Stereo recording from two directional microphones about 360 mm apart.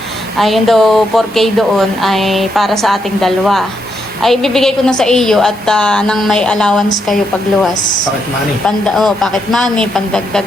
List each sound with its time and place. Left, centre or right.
0.3 s speech: centre
7.7 s speech: left
8.6 s speech: centre